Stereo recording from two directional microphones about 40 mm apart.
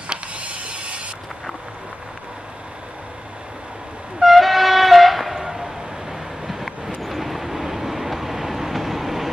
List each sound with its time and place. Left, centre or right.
0.1 s mechanisms: right
4.2 s train: centre
6.4 s vehicle: centre